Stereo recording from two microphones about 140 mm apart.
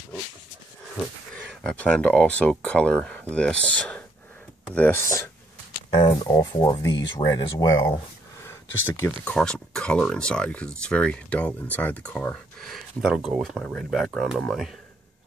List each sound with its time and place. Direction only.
1.5 s speech: 5° left (ahead or behind)
9.2 s speech: 5° left (ahead or behind)